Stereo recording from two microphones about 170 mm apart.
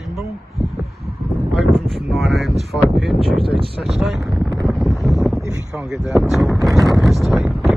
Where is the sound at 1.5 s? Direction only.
Centre (ahead or behind).